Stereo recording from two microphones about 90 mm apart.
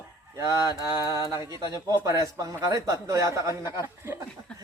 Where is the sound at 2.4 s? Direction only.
40° right (ahead or behind).